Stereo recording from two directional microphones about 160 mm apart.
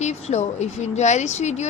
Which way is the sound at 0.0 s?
45° left (ahead or behind).